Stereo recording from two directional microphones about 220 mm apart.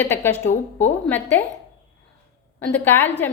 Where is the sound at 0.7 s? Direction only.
10° left (ahead or behind).